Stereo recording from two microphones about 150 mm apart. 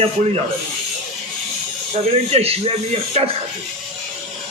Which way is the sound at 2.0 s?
45° right (ahead or behind).